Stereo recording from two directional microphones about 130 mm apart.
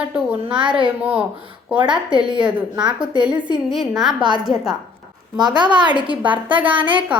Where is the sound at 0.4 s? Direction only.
40° right (ahead or behind).